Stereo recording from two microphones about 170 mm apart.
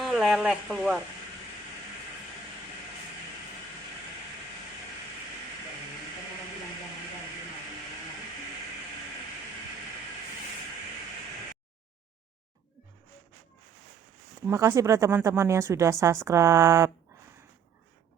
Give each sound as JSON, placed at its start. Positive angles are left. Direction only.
{"t": 0.0, "sound": "speech", "side_deg": 0}
{"t": 14.4, "sound": "a woman's voice", "side_deg": -15}